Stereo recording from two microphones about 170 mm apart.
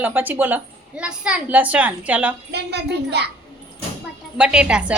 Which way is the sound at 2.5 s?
75° right (ahead or behind).